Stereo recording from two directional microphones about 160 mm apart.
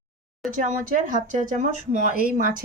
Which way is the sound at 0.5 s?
55° right (ahead or behind).